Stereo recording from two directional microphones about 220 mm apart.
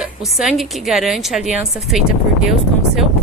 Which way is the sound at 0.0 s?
Centre (ahead or behind).